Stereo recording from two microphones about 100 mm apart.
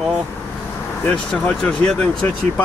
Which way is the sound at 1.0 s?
15° left (ahead or behind).